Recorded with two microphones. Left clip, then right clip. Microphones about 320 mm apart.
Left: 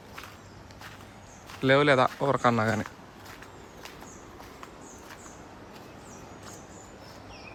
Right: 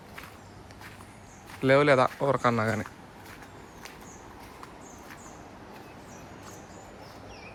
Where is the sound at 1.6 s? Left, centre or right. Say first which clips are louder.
Even; centre.